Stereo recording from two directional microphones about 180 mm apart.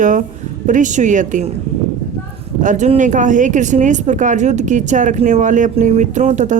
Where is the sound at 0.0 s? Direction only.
45° right (ahead or behind).